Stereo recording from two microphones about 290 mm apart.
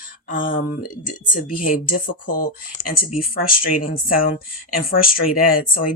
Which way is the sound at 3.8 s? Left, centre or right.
Left.